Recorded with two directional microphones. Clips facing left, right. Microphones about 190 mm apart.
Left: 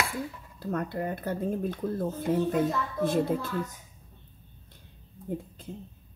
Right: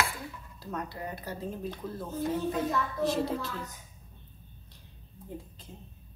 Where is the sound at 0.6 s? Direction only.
55° left (ahead or behind).